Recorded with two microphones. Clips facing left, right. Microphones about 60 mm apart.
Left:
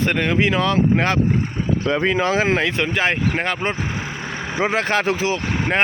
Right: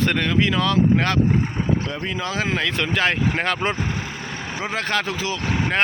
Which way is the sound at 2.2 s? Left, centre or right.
Left.